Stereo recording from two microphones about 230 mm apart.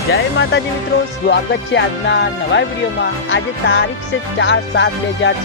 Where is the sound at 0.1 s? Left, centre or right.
Left.